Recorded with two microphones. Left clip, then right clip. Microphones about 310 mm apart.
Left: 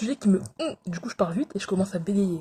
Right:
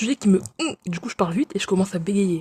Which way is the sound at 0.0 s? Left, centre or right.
Right.